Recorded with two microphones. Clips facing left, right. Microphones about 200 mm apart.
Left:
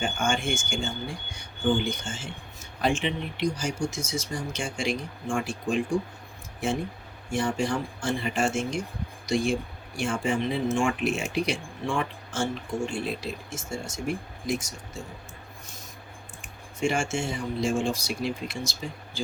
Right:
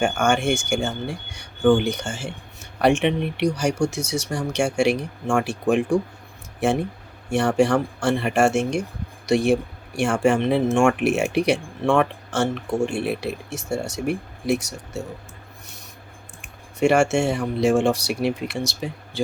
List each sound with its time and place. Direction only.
0.0 s speech: 70° right (ahead or behind)
7.3 s speech: 70° right (ahead or behind)
16.8 s speech: 65° right (ahead or behind)